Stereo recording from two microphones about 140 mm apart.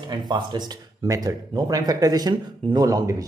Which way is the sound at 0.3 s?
30° right (ahead or behind).